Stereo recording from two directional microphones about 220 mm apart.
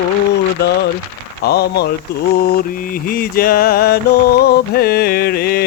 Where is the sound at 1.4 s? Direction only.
45° left (ahead or behind).